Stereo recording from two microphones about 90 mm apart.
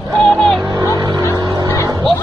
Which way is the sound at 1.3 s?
45° right (ahead or behind).